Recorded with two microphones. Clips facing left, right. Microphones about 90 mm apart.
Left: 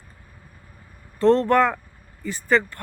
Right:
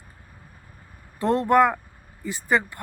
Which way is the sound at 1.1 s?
15° right (ahead or behind).